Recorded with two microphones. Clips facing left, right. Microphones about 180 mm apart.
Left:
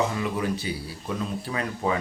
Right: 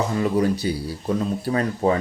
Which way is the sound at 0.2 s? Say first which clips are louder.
Right 7 dB; 40° right (ahead or behind).